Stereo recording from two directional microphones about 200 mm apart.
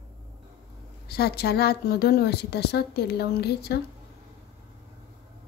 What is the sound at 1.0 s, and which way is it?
A woman's voice, 50° left (ahead or behind).